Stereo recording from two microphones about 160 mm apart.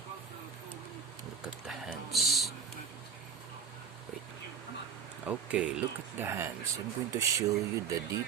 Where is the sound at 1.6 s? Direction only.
Centre (ahead or behind).